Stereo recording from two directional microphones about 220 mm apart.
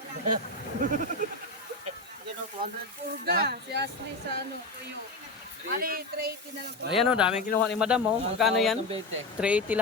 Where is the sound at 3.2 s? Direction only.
45° right (ahead or behind).